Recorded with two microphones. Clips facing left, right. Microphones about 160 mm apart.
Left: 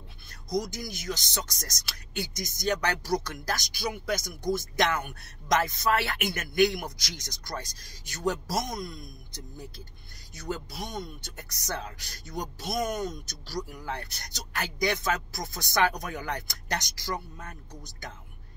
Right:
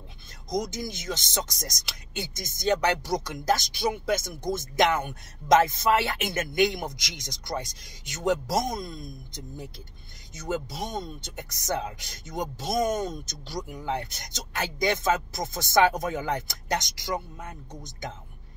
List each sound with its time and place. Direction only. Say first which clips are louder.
0.6 s speech: right 1 dB; 20° right (ahead or behind)